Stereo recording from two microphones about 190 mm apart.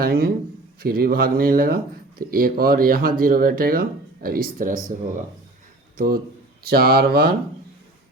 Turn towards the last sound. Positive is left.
turn(degrees=-55)  # may be behind; listen again after turning